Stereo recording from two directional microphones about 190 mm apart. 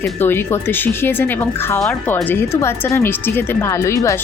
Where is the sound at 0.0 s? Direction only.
10° left (ahead or behind).